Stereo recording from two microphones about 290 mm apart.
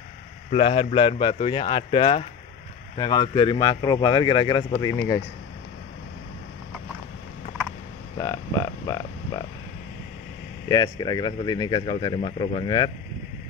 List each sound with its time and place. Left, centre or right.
0.5 s speech: centre
8.2 s hum: centre
10.7 s speech: centre